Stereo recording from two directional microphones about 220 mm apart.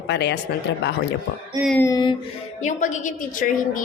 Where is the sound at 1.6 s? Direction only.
10° left (ahead or behind).